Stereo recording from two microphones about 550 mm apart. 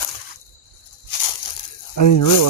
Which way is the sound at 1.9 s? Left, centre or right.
Left.